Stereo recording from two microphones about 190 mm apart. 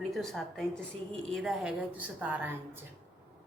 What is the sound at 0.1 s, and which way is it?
A woman's voice, centre (ahead or behind).